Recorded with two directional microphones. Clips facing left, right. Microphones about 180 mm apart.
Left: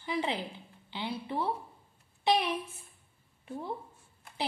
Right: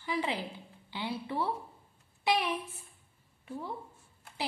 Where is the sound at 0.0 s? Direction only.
25° left (ahead or behind).